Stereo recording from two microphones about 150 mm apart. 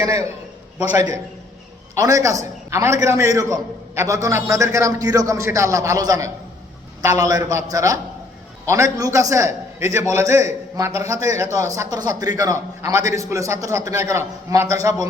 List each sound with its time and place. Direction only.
0.0 s a man's voice: 25° right (ahead or behind)
2.0 s a man's voice: 20° right (ahead or behind)